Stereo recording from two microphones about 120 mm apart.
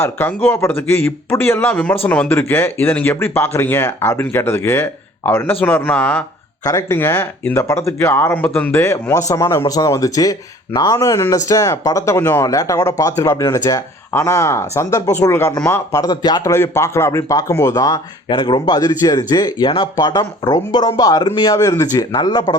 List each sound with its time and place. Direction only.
0.0 s speech: 15° left (ahead or behind)
6.7 s speech: 30° left (ahead or behind)
7.2 s speech: 15° left (ahead or behind)
7.6 s speech: 25° left (ahead or behind)
16.0 s speech: 35° left (ahead or behind)
18.3 s speech: 40° left (ahead or behind)